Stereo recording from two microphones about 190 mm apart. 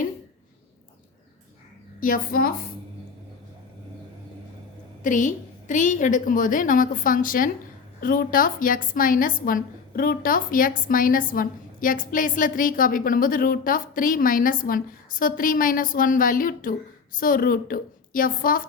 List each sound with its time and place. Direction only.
2.0 s a woman's voice: 45° left (ahead or behind)
5.0 s a woman's voice: 40° left (ahead or behind)